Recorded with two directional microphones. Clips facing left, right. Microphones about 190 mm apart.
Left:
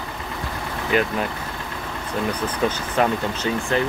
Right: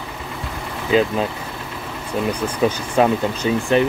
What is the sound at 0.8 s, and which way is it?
Speech, 20° right (ahead or behind).